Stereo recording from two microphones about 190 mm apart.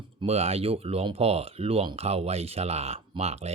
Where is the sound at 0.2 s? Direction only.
30° right (ahead or behind).